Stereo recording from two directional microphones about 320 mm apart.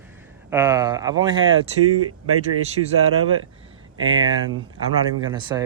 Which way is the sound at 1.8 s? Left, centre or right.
Right.